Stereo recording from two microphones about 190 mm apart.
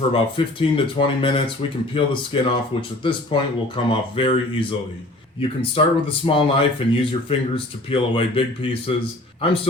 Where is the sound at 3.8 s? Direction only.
25° left (ahead or behind).